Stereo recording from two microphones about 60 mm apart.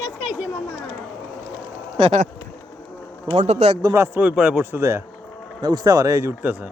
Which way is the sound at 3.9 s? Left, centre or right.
Right.